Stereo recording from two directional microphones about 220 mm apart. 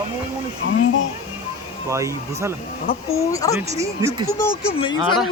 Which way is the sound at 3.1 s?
15° left (ahead or behind).